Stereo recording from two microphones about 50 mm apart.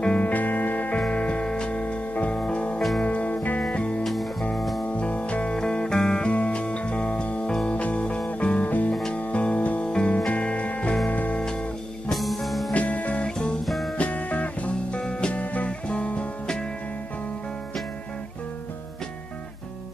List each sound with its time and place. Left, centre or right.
0.0 s music: centre
0.3 s music: left
0.9 s music: centre
4.0 s music: centre
4.8 s music: left
11.3 s music: centre
12.1 s music: centre
12.7 s music: left
13.7 s music: centre
13.9 s music: left